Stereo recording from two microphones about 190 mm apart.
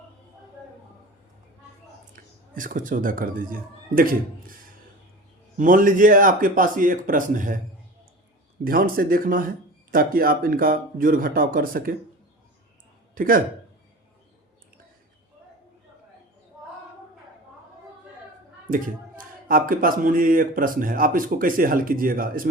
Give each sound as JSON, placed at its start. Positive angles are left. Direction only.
{"t": 2.1, "sound": "speech", "side_deg": -45}
{"t": 5.5, "sound": "speech", "side_deg": -45}
{"t": 8.6, "sound": "speech", "side_deg": -50}
{"t": 13.1, "sound": "speech", "side_deg": -45}
{"t": 18.7, "sound": "speech", "side_deg": -45}